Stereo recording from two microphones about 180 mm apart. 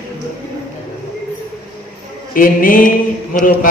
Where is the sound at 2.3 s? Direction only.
50° left (ahead or behind).